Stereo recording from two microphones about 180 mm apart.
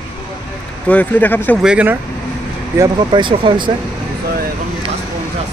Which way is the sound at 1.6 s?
5° right (ahead or behind).